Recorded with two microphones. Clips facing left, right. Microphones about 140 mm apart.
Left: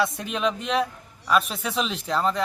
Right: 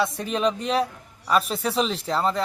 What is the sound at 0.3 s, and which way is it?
Speech, 35° right (ahead or behind).